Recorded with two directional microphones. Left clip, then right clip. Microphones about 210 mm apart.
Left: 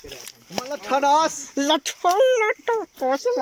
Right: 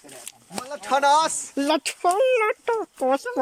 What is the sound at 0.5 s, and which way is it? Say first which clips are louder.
Speech: even; 5° left (ahead or behind).